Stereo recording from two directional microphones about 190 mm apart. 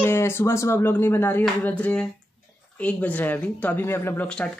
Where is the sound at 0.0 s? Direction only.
15° left (ahead or behind).